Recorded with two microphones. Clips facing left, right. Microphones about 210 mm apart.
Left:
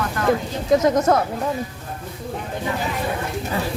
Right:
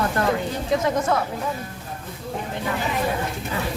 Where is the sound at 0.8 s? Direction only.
40° left (ahead or behind).